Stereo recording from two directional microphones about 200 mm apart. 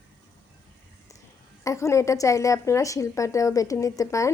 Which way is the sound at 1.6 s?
15° left (ahead or behind).